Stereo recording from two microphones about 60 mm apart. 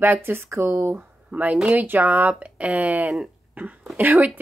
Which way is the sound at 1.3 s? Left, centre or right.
Right.